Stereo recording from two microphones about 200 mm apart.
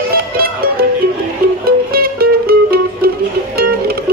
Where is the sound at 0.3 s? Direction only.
50° right (ahead or behind).